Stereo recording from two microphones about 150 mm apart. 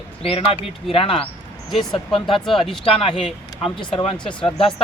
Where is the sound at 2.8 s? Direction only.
40° left (ahead or behind).